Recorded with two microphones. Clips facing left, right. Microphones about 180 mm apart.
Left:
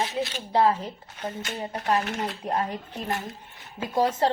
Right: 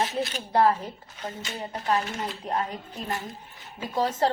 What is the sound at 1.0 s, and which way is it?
Speech, 65° left (ahead or behind).